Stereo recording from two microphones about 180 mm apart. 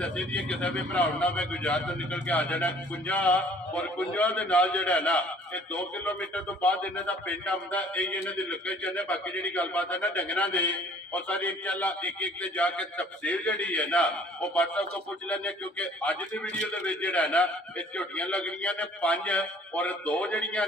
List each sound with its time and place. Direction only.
0.0 s a man's voice: 5° left (ahead or behind)